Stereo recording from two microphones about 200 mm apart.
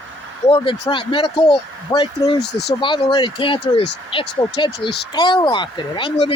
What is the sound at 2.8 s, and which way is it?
Speech, 25° left (ahead or behind).